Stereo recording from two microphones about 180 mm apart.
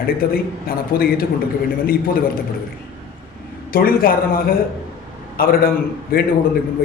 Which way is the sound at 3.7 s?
55° left (ahead or behind).